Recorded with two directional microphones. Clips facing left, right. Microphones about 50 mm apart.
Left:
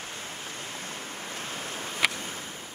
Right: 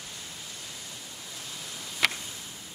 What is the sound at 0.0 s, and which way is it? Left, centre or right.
Waves, left.